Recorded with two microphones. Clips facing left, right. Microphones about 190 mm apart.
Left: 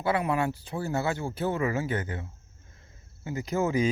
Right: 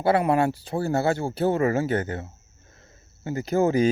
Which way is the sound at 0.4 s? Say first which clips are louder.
Right 5 dB; 90° right.